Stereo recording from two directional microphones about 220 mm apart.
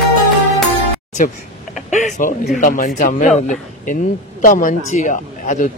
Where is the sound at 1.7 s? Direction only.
35° left (ahead or behind).